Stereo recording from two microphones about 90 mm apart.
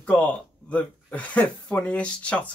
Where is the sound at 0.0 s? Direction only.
15° left (ahead or behind).